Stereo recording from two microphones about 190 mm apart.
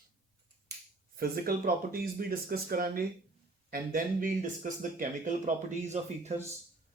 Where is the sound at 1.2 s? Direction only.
50° right (ahead or behind).